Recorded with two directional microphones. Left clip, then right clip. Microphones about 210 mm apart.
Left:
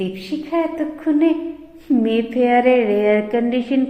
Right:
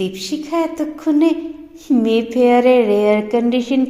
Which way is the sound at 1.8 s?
30° right (ahead or behind).